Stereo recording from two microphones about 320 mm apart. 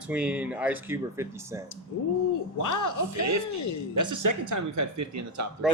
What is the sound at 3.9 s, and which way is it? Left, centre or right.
Speech, right.